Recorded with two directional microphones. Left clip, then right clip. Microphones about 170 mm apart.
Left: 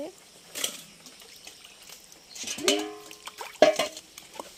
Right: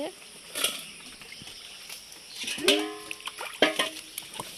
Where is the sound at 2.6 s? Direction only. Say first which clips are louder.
Right 2 dB; 30° left (ahead or behind).